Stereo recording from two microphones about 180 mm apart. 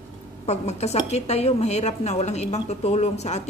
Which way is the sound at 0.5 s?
35° left (ahead or behind).